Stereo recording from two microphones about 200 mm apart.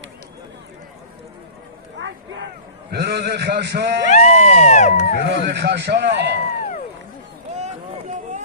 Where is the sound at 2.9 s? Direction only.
55° right (ahead or behind).